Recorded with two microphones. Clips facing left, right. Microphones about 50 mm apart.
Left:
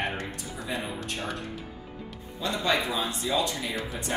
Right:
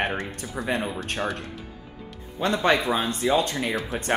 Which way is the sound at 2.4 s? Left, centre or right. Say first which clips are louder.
Right 5 dB; right.